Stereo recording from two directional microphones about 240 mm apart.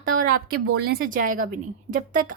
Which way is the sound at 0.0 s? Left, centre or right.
Right.